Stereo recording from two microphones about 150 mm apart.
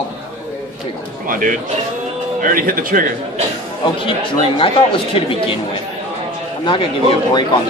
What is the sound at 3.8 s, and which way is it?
A man's voice, 35° left (ahead or behind).